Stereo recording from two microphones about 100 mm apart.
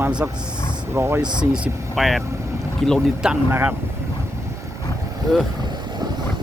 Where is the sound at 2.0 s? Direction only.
Centre (ahead or behind).